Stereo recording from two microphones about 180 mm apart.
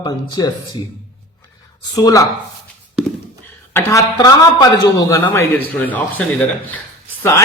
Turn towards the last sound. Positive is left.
turn(degrees=15)  # may be behind; listen again after turning